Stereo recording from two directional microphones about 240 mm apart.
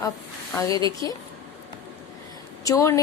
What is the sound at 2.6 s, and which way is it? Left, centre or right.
Speech, centre.